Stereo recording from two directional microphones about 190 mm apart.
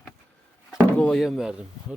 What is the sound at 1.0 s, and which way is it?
Speech, 5° left (ahead or behind).